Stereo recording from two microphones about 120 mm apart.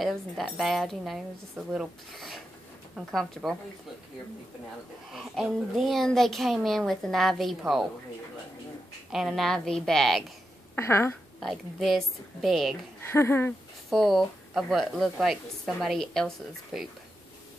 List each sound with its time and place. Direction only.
0.0 s a woman's voice: centre (ahead or behind)
5.1 s a woman's voice: centre (ahead or behind)
9.1 s a woman's voice: centre (ahead or behind)
10.8 s speech: 20° left (ahead or behind)
11.3 s a woman's voice: centre (ahead or behind)
13.0 s speech: 20° left (ahead or behind)
13.8 s a woman's voice: centre (ahead or behind)